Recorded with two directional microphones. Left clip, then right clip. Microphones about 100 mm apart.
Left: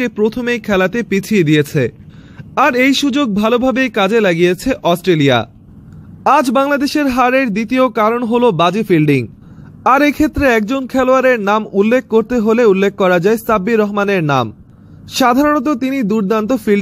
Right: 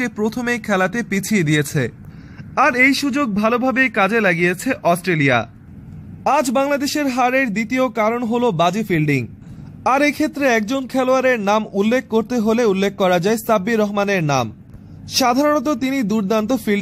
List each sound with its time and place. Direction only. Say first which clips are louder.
0.0 s a man's voice: left 6 dB; 15° left (ahead or behind)
2.5 s a man's voice: left 3 dB; 35° left (ahead or behind)
15.5 s speech: left 3 dB; 10° left (ahead or behind)